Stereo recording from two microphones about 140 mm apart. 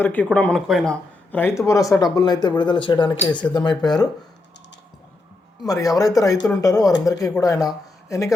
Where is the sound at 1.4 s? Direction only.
20° left (ahead or behind).